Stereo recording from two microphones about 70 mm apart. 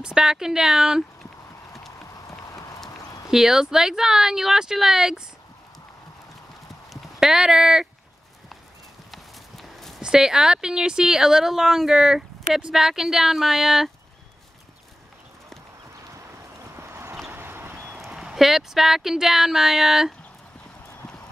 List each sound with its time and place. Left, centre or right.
0.0 s speech: centre
3.3 s speech: centre
6.9 s speech: centre
9.1 s clip-clop: centre
10.0 s speech: centre
16.7 s clip-clop: right
17.9 s speech: centre